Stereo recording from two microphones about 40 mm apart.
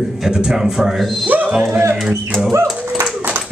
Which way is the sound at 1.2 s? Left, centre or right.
Right.